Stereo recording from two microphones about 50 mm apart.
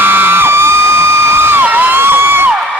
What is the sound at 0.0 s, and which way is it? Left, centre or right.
Music, right.